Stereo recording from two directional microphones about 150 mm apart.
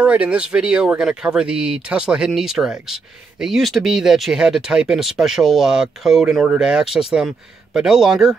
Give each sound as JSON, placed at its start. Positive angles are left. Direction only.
{"t": 0.0, "sound": "speech", "side_deg": -10}